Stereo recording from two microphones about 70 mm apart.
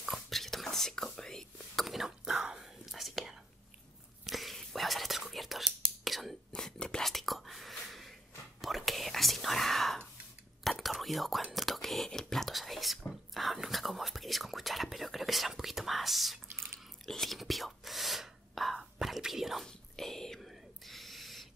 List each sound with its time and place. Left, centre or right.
0.0 s whispering: centre
16.4 s drip: right
17.0 s whispering: centre
19.6 s whispering: centre